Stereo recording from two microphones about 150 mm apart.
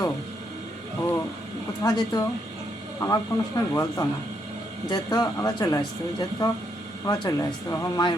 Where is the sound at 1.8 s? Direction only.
25° left (ahead or behind).